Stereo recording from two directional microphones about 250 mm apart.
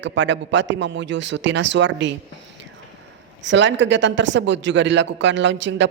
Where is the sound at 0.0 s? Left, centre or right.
Right.